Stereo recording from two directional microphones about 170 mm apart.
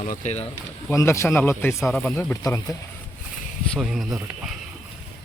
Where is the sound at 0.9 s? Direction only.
15° left (ahead or behind).